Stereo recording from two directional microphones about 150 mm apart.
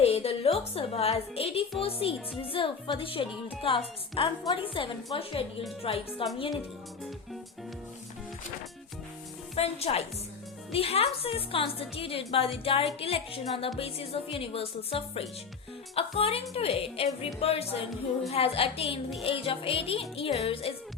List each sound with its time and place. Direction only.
0.0 s a woman's voice: 45° left (ahead or behind)
9.6 s a woman's voice: 40° left (ahead or behind)